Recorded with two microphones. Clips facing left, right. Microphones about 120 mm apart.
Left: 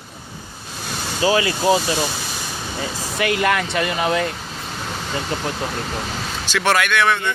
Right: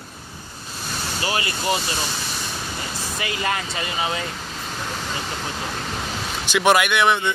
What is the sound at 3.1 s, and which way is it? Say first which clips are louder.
Speech: left 7 dB; 75° left (ahead or behind).